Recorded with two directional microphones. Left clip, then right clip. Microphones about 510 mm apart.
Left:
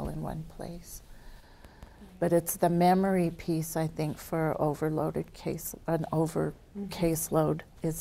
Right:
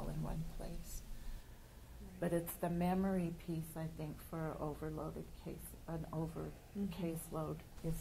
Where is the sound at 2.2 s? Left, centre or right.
Left.